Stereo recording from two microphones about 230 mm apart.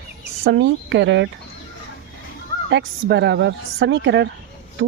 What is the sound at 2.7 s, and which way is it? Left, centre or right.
Speech, right.